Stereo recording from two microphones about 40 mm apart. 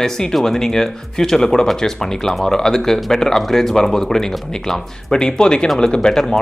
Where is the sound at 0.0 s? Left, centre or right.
Centre.